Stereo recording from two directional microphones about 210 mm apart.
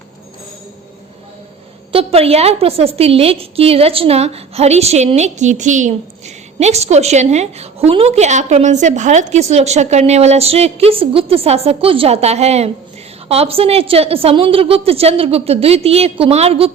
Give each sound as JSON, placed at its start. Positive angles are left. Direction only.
{"t": 1.9, "sound": "a woman's voice", "side_deg": -30}